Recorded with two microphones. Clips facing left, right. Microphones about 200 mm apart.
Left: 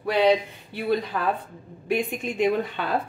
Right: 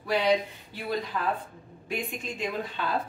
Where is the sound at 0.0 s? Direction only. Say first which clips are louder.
Left 6 dB; 65° left (ahead or behind).